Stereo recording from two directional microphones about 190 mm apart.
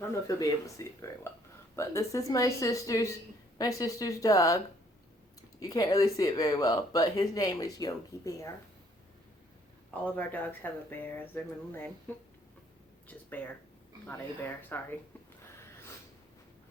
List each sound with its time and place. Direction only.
0.0 s speech: 15° left (ahead or behind)
10.2 s speech: 10° left (ahead or behind)
13.3 s speech: 10° left (ahead or behind)